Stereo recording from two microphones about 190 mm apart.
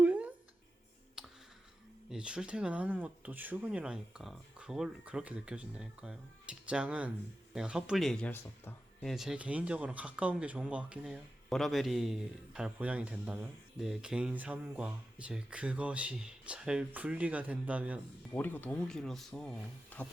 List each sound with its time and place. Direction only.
0.0 s a sound: 10° right (ahead or behind)
2.0 s speech: 5° right (ahead or behind)
18.3 s speech: 10° left (ahead or behind)